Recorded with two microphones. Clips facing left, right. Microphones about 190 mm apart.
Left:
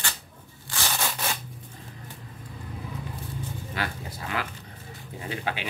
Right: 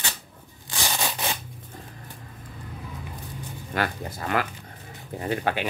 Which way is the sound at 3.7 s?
50° right (ahead or behind).